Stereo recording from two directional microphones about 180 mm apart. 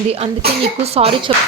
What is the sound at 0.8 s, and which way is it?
Speech, 35° right (ahead or behind).